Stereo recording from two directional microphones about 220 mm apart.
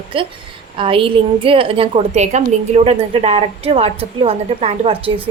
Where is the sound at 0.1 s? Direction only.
25° right (ahead or behind).